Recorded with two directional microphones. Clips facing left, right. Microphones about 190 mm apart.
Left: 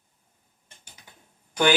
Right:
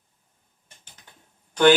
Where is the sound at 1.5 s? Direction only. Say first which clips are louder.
Right 6 dB; 10° left (ahead or behind).